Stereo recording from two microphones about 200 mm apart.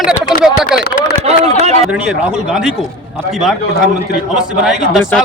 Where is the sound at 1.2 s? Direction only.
30° right (ahead or behind).